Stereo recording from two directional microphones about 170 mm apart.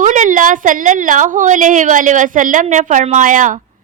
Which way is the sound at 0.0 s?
45° right (ahead or behind).